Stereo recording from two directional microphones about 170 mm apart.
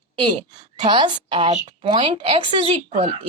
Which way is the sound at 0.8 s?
30° right (ahead or behind).